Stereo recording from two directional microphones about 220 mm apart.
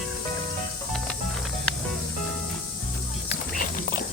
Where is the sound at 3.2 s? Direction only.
40° left (ahead or behind).